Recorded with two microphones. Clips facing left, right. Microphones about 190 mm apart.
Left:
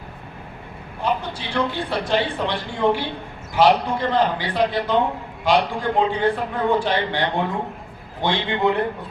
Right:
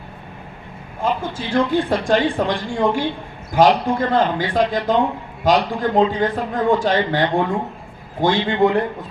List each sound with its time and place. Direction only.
1.0 s speech: 45° right (ahead or behind)